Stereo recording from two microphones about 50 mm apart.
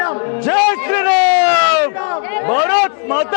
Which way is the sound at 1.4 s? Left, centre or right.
Centre.